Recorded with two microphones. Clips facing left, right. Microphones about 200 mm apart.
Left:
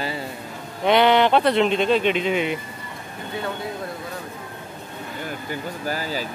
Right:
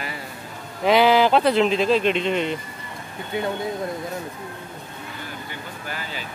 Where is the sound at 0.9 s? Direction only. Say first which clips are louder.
Even; centre (ahead or behind).